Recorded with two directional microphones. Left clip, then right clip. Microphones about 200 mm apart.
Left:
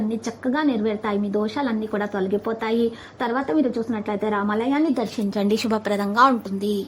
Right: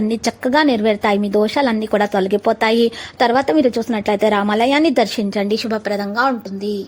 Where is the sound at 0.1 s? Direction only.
35° right (ahead or behind).